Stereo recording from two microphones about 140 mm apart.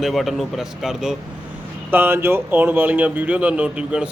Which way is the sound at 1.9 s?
15° right (ahead or behind).